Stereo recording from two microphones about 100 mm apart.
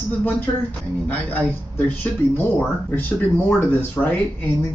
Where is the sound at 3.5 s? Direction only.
20° left (ahead or behind).